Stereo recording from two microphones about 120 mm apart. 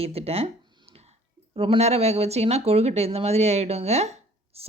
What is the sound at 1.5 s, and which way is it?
Speech, 45° right (ahead or behind).